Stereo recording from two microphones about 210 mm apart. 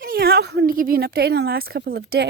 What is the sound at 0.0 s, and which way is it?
Speech, 45° right (ahead or behind).